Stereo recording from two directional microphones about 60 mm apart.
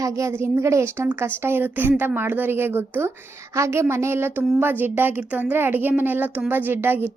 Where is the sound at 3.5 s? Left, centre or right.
Right.